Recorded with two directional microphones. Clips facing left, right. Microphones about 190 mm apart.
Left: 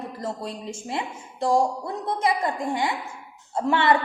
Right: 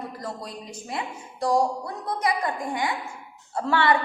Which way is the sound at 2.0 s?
25° left (ahead or behind).